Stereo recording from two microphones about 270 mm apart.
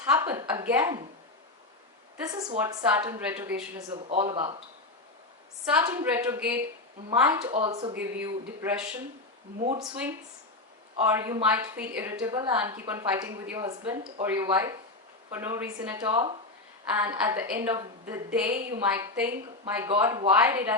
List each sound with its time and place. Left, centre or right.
0.1 s a woman's voice: centre
2.2 s a woman's voice: centre
5.7 s a woman's voice: centre